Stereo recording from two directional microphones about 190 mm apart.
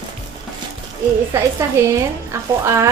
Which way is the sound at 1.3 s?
15° right (ahead or behind).